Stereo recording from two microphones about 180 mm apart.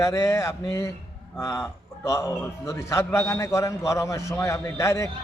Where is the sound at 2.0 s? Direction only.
15° left (ahead or behind).